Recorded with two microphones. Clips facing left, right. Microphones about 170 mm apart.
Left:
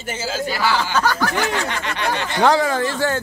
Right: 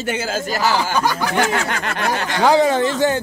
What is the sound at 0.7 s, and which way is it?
Speech, 15° right (ahead or behind).